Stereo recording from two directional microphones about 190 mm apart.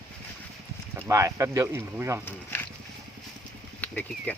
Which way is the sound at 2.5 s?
10° left (ahead or behind).